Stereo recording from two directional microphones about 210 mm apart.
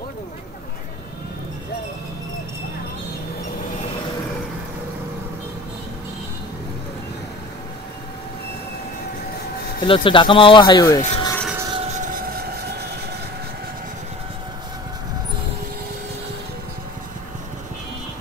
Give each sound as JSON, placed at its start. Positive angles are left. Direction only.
{"t": 9.8, "sound": "speech", "side_deg": 25}
{"t": 11.4, "sound": "train", "side_deg": -10}
{"t": 11.7, "sound": "train", "side_deg": -30}
{"t": 12.1, "sound": "train", "side_deg": -45}